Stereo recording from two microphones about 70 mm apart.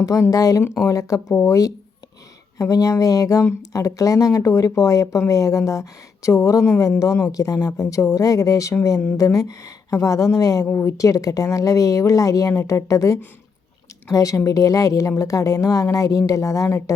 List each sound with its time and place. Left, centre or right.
0.0 s a woman's voice: left
10.7 s speech: left